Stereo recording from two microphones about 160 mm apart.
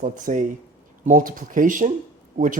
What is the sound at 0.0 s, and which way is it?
Speech, 55° right (ahead or behind).